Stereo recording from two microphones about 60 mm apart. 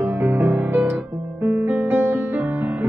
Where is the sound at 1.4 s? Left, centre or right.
Right.